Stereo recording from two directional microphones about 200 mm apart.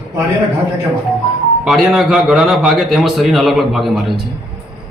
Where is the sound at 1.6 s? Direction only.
Centre (ahead or behind).